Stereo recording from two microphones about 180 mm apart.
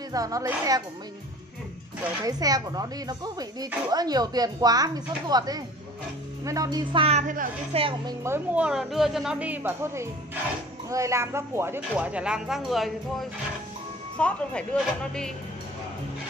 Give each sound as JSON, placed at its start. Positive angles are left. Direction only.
{"t": 0.1, "sound": "speech", "side_deg": -20}
{"t": 2.2, "sound": "speech", "side_deg": -20}
{"t": 7.7, "sound": "speech", "side_deg": -25}